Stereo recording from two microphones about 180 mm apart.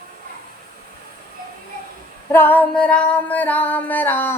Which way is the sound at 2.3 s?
10° left (ahead or behind).